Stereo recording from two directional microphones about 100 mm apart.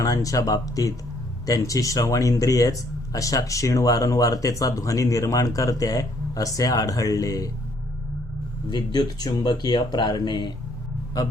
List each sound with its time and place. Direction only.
0.0 s speech: 35° left (ahead or behind)
8.7 s speech: 45° left (ahead or behind)